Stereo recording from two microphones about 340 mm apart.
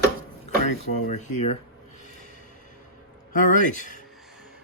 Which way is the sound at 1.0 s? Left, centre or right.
Left.